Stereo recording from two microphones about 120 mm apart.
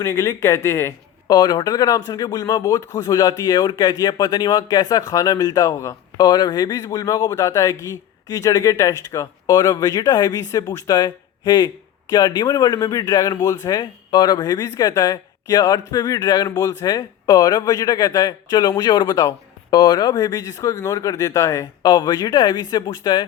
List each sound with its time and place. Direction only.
0.0 s speech: 25° left (ahead or behind)
1.3 s speech: 35° left (ahead or behind)